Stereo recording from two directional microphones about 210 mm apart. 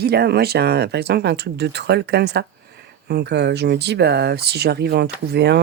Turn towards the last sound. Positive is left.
turn(degrees=-50)  # may be behind; listen again after turning